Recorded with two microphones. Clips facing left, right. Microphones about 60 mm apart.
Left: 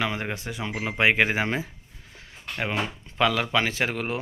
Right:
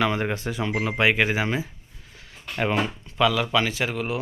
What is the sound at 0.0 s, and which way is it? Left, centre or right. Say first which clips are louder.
Speech: right 5 dB; centre.